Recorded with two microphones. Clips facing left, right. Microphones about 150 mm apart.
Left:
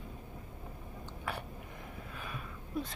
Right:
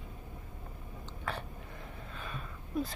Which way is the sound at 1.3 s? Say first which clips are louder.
Right 1 dB; 10° left (ahead or behind).